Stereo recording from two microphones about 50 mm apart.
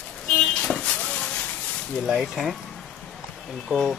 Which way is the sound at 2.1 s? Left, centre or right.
Centre.